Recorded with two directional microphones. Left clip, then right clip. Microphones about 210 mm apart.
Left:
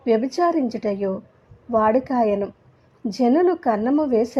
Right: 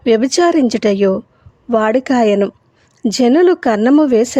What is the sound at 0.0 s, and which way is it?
Speech, 35° right (ahead or behind).